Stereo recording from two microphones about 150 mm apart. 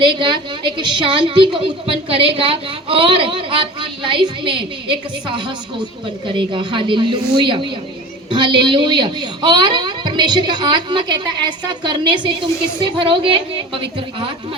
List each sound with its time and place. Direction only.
0.0 s a woman's voice: 30° right (ahead or behind)
6.2 s a woman's voice: 35° right (ahead or behind)